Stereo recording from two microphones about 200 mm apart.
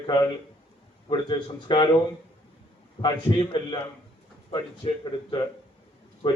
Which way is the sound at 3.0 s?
25° left (ahead or behind).